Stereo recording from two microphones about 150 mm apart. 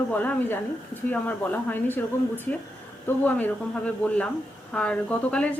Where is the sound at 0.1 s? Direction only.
10° left (ahead or behind).